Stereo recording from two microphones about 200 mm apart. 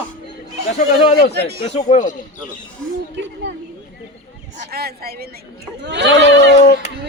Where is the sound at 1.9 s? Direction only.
40° left (ahead or behind).